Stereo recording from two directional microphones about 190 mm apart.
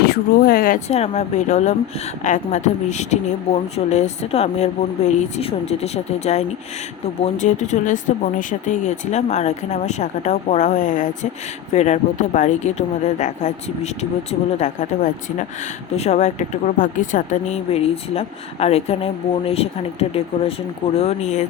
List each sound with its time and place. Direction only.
0.0 s speech: 50° left (ahead or behind)
0.9 s speech: 35° left (ahead or behind)